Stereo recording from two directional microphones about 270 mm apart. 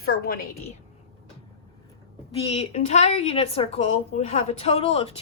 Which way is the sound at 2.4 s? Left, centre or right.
Left.